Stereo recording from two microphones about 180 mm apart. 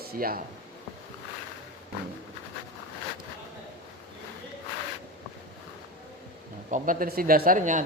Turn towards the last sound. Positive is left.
turn(degrees=-45)  # may be behind; listen again after turning